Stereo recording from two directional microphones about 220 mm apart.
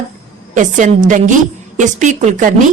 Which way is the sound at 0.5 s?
35° right (ahead or behind).